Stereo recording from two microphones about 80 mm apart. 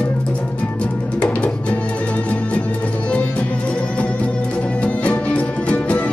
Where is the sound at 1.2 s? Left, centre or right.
Centre.